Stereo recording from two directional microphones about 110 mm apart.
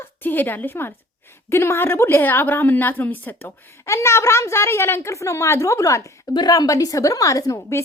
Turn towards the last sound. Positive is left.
turn(degrees=25)  # may be behind; listen again after turning